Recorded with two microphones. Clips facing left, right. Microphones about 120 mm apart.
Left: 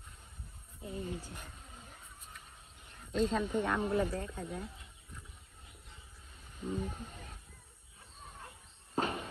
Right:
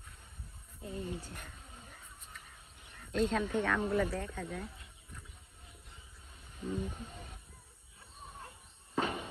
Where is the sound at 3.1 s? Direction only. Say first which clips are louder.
Even; centre (ahead or behind).